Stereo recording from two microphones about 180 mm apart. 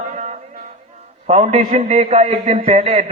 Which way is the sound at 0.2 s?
40° right (ahead or behind).